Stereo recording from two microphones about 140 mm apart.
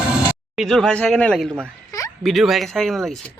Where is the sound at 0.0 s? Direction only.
5° right (ahead or behind).